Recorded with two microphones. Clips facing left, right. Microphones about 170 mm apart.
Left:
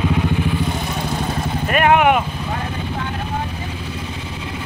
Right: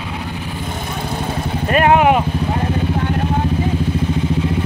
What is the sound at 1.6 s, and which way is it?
Vehicle, 30° right (ahead or behind).